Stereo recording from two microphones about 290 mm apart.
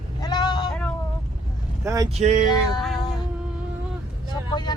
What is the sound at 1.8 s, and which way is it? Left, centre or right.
Speech, centre.